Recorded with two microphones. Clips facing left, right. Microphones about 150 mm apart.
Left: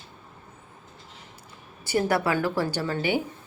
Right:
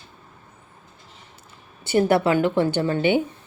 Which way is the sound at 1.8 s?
25° right (ahead or behind).